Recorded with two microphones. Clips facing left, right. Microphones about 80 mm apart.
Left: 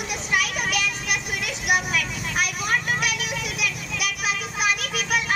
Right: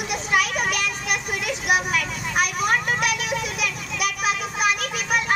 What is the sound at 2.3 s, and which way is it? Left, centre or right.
Vehicle, right.